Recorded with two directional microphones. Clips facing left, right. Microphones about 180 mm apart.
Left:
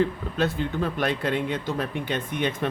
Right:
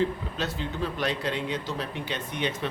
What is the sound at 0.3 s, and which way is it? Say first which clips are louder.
Speech: left 8 dB; 55° left (ahead or behind).